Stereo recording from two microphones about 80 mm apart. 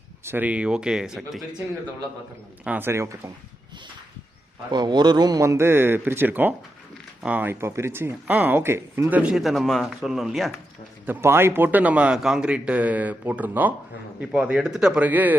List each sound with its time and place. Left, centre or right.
0.3 s speech: right; by 1.6 s centre
2.6 s a man's voice: right
4.7 s speech: right
5.4 s a man's voice: right
9.0 s a man's voice: centre
9.3 s speech: centre
11.0 s a man's voice: right